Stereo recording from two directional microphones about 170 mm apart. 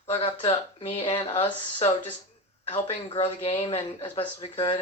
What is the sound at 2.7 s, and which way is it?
Speech, 30° left (ahead or behind).